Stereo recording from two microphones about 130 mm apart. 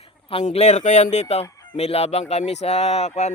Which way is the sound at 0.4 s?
65° left (ahead or behind).